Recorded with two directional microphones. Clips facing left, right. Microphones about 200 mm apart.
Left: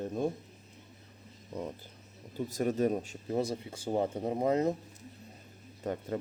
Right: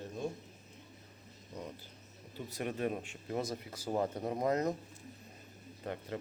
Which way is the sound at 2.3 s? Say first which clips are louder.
Left 8 dB; 45° left (ahead or behind).